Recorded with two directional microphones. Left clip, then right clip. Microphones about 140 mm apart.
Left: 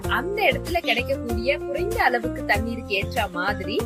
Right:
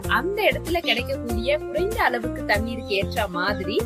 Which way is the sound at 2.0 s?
25° right (ahead or behind).